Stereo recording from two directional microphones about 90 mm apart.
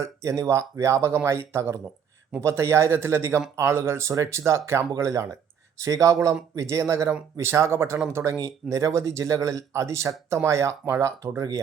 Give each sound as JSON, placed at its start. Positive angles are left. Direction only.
{"t": 0.0, "sound": "speech", "side_deg": -35}